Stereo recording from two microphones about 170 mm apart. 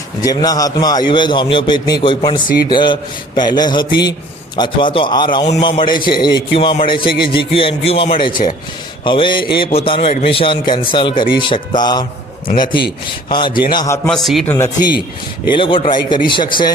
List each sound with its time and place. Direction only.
0.2 s a man's voice: 20° left (ahead or behind)
8.3 s speech: 55° left (ahead or behind)
9.0 s a man's voice: 30° left (ahead or behind)
14.1 s a man's voice: centre (ahead or behind)
14.4 s speech: 15° left (ahead or behind)
15.5 s a man's voice: 30° left (ahead or behind)